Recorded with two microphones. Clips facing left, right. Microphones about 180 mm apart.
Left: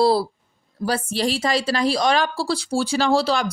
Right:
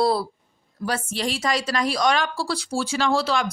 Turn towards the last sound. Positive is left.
turn(degrees=30)  # may be behind; listen again after turning